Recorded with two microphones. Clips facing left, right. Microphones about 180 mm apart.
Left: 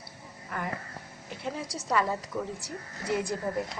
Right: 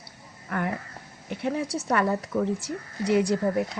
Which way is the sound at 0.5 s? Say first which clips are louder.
Right 6 dB; 60° right (ahead or behind).